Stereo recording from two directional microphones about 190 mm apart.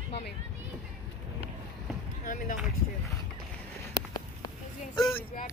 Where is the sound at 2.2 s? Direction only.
45° left (ahead or behind).